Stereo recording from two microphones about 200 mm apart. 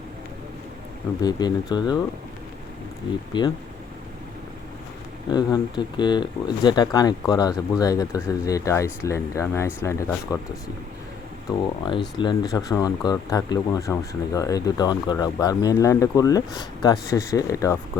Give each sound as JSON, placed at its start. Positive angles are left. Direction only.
{"t": 1.2, "sound": "speech", "side_deg": 20}
{"t": 3.3, "sound": "speech", "side_deg": 20}
{"t": 5.3, "sound": "speech", "side_deg": 20}
{"t": 11.9, "sound": "speech", "side_deg": 25}